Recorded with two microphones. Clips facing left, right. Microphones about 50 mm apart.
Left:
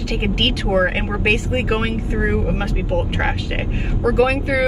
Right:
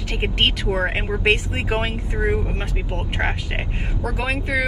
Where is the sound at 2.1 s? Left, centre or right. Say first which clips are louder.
Left 1 dB; left.